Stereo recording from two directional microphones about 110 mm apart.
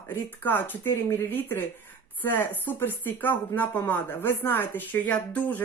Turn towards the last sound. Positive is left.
turn(degrees=15)  # may be behind; listen again after turning